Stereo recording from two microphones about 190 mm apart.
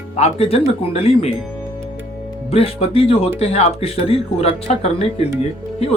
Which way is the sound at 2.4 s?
30° left (ahead or behind).